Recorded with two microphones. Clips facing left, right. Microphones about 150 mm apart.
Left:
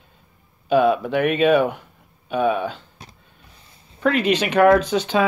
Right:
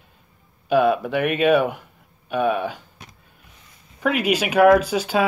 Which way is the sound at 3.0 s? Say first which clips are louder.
Left 1 dB; 35° left (ahead or behind).